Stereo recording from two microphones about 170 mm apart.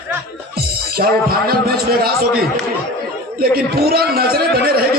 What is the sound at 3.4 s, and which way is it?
A man's voice, 60° right (ahead or behind).